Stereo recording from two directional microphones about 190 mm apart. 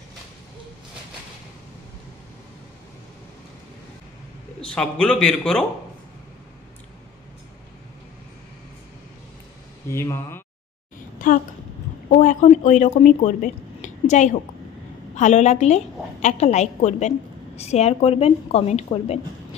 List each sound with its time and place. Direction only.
4.6 s a man's voice: 5° left (ahead or behind)
9.8 s speech: 15° left (ahead or behind)
11.2 s a sound: 45° left (ahead or behind)
12.1 s a woman's voice: 40° left (ahead or behind)